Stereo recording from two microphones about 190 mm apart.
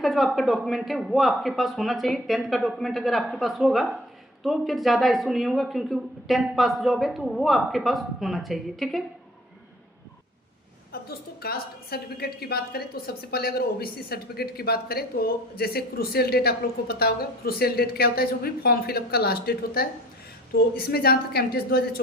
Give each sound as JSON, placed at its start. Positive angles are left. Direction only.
{"t": 0.0, "sound": "a woman's voice", "side_deg": 0}
{"t": 11.1, "sound": "a woman's voice", "side_deg": 55}